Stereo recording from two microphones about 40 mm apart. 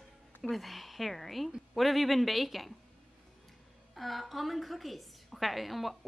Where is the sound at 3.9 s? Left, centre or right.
Centre.